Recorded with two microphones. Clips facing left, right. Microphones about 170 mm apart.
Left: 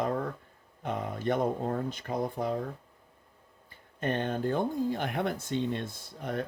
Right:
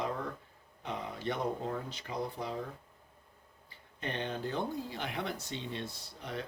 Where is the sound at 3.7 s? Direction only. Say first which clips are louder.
Left 8 dB; 50° left (ahead or behind).